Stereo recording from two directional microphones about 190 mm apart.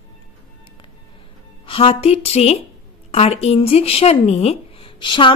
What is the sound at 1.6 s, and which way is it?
Speech, 30° left (ahead or behind).